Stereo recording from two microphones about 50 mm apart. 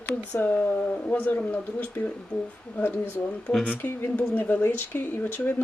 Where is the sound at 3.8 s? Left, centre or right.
Left.